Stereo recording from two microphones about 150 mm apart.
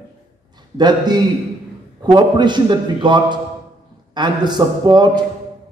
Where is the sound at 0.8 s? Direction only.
30° right (ahead or behind).